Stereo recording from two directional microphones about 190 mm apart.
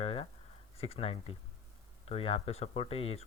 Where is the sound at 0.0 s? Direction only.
30° left (ahead or behind).